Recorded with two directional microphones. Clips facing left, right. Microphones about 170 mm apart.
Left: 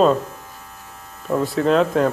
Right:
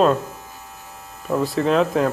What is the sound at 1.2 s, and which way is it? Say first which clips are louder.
Speech: left 1 dB; centre (ahead or behind).